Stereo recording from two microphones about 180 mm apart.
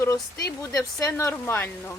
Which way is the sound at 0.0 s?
20° left (ahead or behind).